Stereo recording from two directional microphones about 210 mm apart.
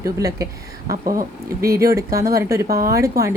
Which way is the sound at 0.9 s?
45° right (ahead or behind).